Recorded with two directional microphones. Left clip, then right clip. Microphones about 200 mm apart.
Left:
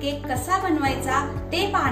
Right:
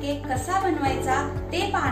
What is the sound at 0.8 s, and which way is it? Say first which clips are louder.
A woman's voice: left 1 dB; 55° left (ahead or behind).